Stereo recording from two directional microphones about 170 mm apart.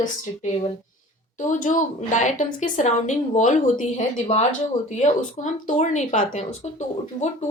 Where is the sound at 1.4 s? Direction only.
45° left (ahead or behind).